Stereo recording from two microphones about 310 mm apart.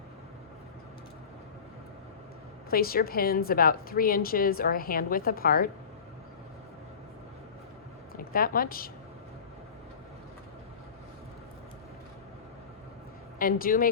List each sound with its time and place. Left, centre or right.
2.6 s a woman's voice: left
8.1 s a woman's voice: left
13.4 s a woman's voice: left